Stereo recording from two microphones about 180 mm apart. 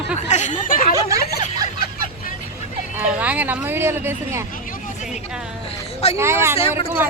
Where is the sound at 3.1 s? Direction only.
10° right (ahead or behind).